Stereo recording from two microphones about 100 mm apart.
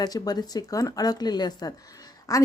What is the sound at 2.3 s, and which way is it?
Speech, 35° left (ahead or behind).